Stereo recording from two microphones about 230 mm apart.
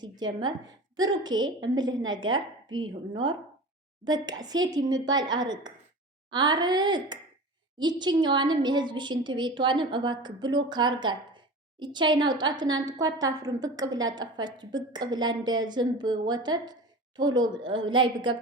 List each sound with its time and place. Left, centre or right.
0.0 s a woman's voice: centre